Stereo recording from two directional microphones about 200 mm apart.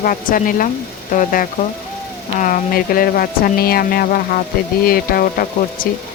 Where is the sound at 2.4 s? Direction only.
40° left (ahead or behind).